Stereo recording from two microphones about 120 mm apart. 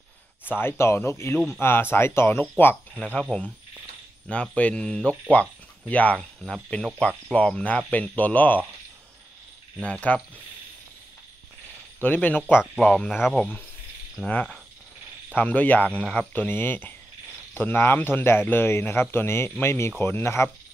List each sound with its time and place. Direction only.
0.5 s speech: 20° left (ahead or behind)
9.8 s speech: 10° left (ahead or behind)
12.0 s speech: 15° left (ahead or behind)
12.9 s speech: centre (ahead or behind); by 20.4 s 20° left (ahead or behind)